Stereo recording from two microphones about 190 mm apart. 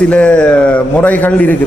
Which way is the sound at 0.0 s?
5° left (ahead or behind).